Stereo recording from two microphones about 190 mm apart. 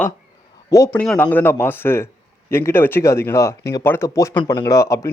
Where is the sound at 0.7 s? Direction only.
15° left (ahead or behind).